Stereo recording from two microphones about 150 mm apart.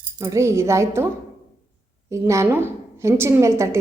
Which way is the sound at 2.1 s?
20° right (ahead or behind).